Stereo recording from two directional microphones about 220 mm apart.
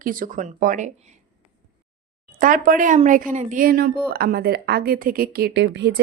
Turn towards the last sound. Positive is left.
turn(degrees=-50)  # may be behind; listen again after turning